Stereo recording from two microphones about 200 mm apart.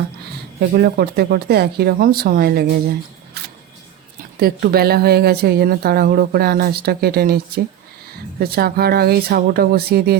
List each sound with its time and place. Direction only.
0.8 s speech: 50° right (ahead or behind)
4.4 s speech: 50° right (ahead or behind)